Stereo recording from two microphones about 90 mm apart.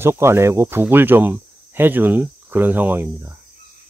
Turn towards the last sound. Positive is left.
turn(degrees=-20)  # may be behind; listen again after turning